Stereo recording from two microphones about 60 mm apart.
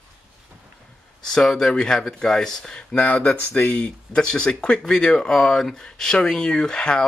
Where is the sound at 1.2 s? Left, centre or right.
Centre.